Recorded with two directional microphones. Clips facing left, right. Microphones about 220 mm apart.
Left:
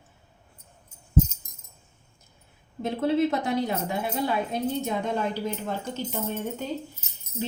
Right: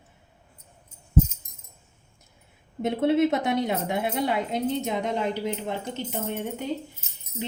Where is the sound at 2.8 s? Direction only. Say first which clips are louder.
Right 2 dB; 25° right (ahead or behind).